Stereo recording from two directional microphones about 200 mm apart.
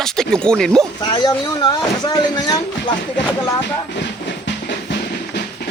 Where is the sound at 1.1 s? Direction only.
20° left (ahead or behind).